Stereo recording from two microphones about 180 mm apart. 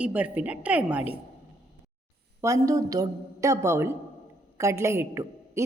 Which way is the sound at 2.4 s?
15° right (ahead or behind).